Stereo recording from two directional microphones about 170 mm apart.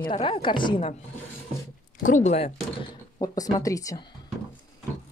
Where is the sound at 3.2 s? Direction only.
20° left (ahead or behind).